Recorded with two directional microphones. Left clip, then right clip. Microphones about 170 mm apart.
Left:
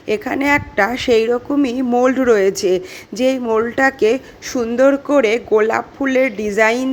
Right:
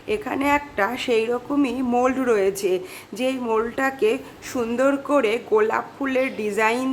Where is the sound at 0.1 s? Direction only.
25° left (ahead or behind).